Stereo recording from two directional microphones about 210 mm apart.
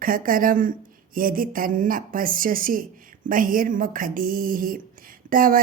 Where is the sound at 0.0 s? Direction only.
40° right (ahead or behind).